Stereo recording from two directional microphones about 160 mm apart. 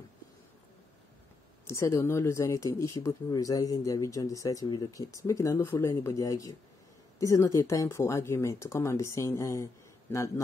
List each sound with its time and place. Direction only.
1.7 s speech: 20° left (ahead or behind)